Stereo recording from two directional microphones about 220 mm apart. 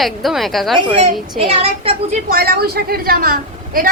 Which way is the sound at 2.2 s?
45° right (ahead or behind).